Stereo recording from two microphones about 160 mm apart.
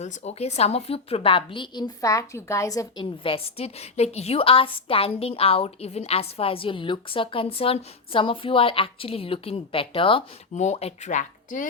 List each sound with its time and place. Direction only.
0.0 s a woman's voice: 45° left (ahead or behind); by 3.1 s 20° left (ahead or behind)
3.2 s a woman's voice: 35° left (ahead or behind)
10.5 s speech: 45° left (ahead or behind)